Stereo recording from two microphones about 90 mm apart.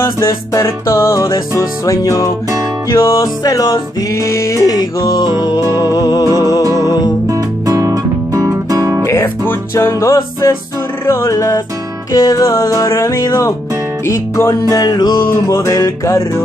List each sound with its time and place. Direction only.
0.2 s music: 30° left (ahead or behind)
7.2 s music: 40° right (ahead or behind)
9.0 s music: 30° left (ahead or behind)
14.6 s music: 45° left (ahead or behind)
15.1 s music: 30° left (ahead or behind)